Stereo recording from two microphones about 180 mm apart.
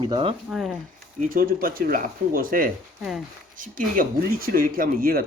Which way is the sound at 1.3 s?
55° right (ahead or behind).